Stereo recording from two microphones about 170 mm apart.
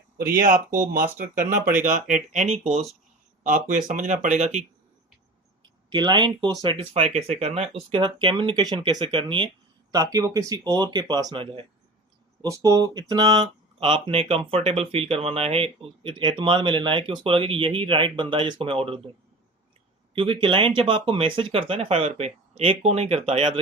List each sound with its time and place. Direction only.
0.2 s speech: 55° right (ahead or behind); by 4.6 s 40° right (ahead or behind)
5.9 s speech: 25° right (ahead or behind)
20.1 s speech: 30° right (ahead or behind)